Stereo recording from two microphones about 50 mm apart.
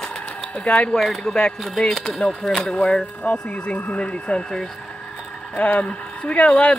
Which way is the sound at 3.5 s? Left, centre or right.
Left.